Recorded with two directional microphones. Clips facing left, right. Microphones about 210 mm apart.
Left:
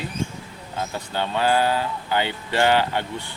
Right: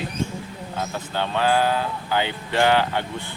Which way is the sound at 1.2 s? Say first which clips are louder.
Even; 10° left (ahead or behind).